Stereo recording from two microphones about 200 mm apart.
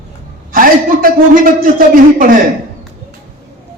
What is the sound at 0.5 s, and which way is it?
A man's voice, 45° right (ahead or behind).